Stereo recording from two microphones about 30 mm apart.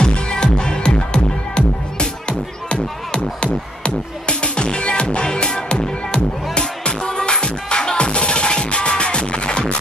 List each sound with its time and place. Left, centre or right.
0.0 s music: left